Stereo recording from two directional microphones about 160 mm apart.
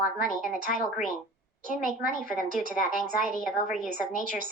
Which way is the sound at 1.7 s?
55° right (ahead or behind).